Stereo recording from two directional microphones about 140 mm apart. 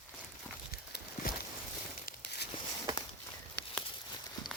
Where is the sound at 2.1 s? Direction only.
90° left.